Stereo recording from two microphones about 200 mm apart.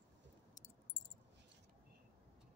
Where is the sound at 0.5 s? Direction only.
15° left (ahead or behind).